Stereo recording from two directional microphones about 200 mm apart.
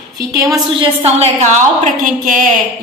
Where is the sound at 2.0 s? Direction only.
40° right (ahead or behind).